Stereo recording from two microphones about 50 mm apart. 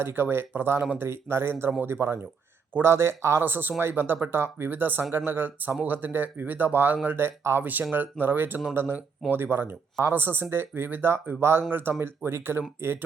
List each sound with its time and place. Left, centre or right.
0.0 s speech: right
3.4 s speech: right
10.8 s speech: right
11.3 s speech: right